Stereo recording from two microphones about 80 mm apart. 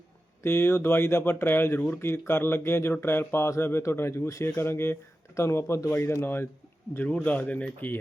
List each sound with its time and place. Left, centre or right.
0.4 s speech: left